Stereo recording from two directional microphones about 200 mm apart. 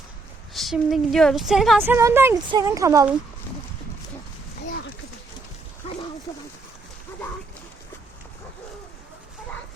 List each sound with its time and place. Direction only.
0.5 s a woman's voice: centre (ahead or behind); by 3.1 s 15° right (ahead or behind)